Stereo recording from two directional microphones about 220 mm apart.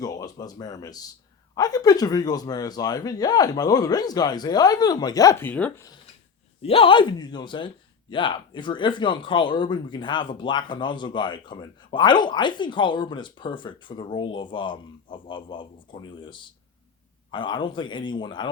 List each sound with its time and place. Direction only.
0.0 s speech: 15° left (ahead or behind)
6.6 s speech: 25° left (ahead or behind)